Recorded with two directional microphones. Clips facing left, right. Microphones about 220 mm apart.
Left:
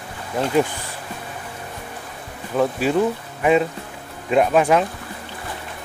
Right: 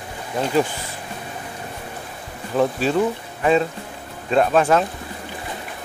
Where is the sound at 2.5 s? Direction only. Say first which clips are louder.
Even; 5° left (ahead or behind).